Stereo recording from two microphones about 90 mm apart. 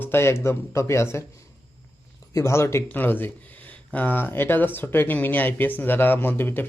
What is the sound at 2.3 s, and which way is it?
A man's voice, 30° left (ahead or behind).